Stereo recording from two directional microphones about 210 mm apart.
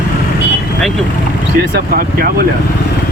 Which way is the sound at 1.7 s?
45° right (ahead or behind).